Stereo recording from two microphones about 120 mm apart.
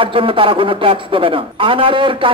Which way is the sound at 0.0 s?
45° right (ahead or behind).